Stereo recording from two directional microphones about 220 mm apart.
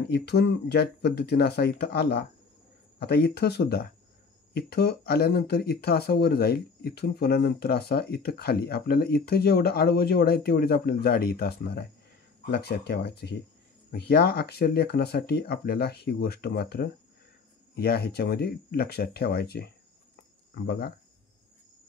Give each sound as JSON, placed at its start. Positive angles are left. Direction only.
{"t": 0.1, "sound": "speech", "side_deg": 45}